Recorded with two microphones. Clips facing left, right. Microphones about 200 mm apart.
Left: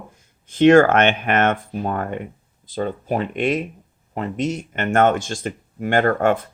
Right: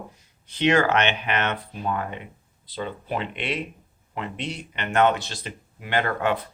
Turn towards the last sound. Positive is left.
turn(degrees=50)  # may be behind; listen again after turning